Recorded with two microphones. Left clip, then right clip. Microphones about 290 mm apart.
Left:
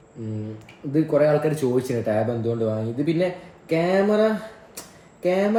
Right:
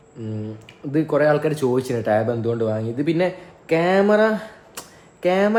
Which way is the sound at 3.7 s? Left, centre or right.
Centre.